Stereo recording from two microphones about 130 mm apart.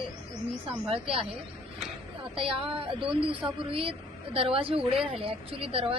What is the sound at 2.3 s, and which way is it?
Speech, 45° right (ahead or behind).